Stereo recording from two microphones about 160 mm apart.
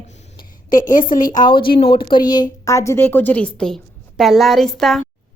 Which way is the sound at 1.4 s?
30° left (ahead or behind).